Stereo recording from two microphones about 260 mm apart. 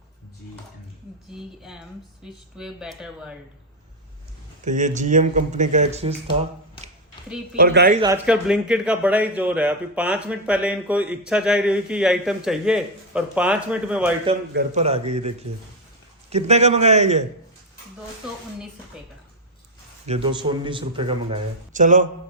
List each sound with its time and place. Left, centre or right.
1.3 s a man's voice: centre
4.6 s speech: right
7.5 s speech: right
8.0 s a man's voice: centre
14.5 s speech: right
16.3 s speech: right
20.1 s speech: right